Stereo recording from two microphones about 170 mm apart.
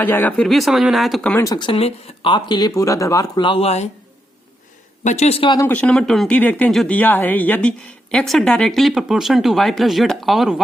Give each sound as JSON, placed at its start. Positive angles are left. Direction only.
{"t": 0.0, "sound": "speech", "side_deg": 10}
{"t": 1.5, "sound": "speech", "side_deg": 30}
{"t": 5.0, "sound": "speech", "side_deg": 40}
{"t": 5.5, "sound": "speech", "side_deg": 10}